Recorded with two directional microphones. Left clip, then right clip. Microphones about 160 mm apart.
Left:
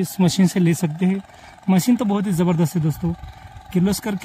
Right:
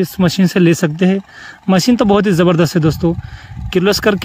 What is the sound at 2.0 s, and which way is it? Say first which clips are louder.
Speech: right 11 dB; 45° right (ahead or behind).